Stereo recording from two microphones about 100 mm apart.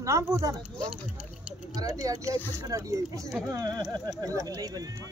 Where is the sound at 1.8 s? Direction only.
35° right (ahead or behind).